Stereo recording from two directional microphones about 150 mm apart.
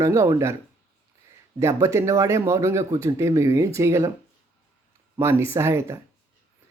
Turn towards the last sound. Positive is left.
turn(degrees=-15)  # may be behind; listen again after turning